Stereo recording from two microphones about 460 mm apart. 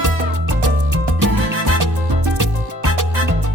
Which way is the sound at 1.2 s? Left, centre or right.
Right.